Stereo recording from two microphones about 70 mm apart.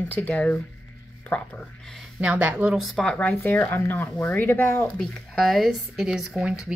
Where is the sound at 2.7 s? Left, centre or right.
Centre.